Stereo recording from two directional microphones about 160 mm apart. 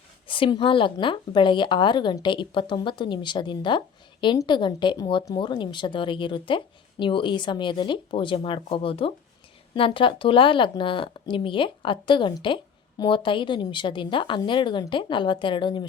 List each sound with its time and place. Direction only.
0.3 s a woman's voice: 30° left (ahead or behind)